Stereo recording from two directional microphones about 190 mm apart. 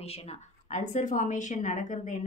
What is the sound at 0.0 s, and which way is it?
Speech, 35° left (ahead or behind).